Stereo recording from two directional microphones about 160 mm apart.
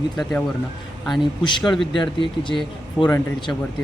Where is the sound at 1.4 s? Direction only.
30° left (ahead or behind).